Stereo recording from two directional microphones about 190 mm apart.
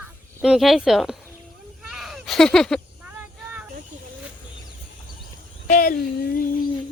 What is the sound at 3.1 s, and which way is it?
Vehicle, 10° right (ahead or behind).